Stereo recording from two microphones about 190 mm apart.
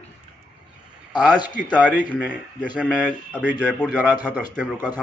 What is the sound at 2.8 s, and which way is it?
Speech, 5° left (ahead or behind).